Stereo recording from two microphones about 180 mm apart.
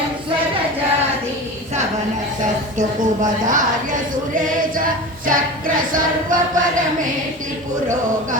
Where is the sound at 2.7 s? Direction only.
45° right (ahead or behind).